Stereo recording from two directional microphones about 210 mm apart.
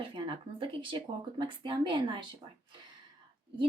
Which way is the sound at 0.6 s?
25° right (ahead or behind).